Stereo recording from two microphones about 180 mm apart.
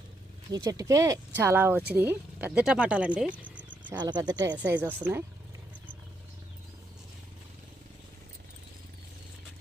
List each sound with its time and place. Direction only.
0.5 s speech: 20° right (ahead or behind)
3.9 s speech: 20° right (ahead or behind)